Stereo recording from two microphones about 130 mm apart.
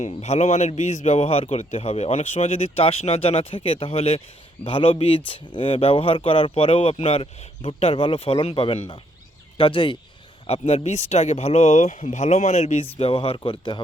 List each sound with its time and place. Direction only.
0.0 s speech: 60° left (ahead or behind); by 13.7 s 40° left (ahead or behind)